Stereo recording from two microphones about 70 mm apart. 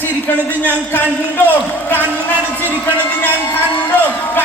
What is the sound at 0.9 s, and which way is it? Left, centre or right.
A man's voice, left.